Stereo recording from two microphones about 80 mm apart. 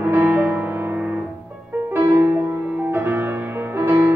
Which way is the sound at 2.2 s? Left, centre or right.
Right.